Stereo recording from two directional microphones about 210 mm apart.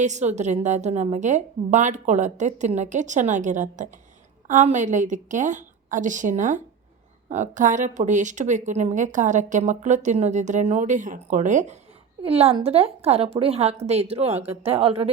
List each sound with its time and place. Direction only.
0.0 s a woman's voice: 35° right (ahead or behind)